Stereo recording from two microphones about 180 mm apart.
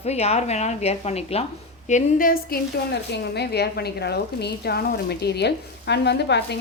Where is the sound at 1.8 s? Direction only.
45° left (ahead or behind).